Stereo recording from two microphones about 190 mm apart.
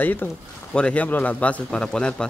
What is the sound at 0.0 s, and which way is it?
Speech, 10° left (ahead or behind).